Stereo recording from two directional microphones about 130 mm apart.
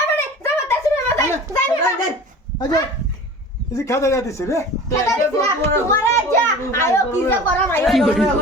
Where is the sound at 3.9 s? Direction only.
25° left (ahead or behind).